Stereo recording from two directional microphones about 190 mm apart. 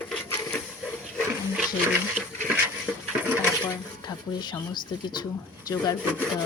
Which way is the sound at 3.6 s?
20° left (ahead or behind).